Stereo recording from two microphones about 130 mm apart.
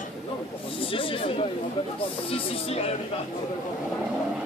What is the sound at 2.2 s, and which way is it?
Speech, 45° left (ahead or behind).